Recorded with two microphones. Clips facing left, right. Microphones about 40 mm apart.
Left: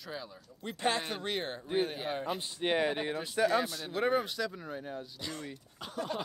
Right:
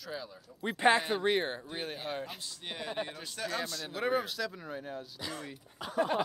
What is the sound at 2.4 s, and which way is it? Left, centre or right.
Speech, left.